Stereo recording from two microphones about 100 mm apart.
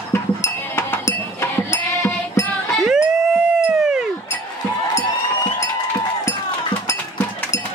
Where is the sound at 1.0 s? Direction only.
30° left (ahead or behind).